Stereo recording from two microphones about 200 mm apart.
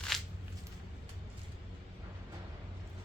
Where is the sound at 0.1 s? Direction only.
Centre (ahead or behind).